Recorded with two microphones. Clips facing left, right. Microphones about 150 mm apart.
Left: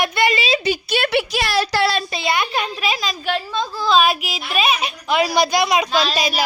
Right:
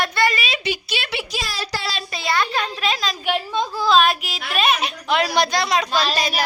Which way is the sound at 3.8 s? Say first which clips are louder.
Left 1 dB; 5° left (ahead or behind).